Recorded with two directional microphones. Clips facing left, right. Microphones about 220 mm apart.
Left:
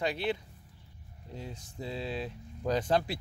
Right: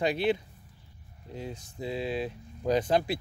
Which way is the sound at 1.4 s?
15° right (ahead or behind).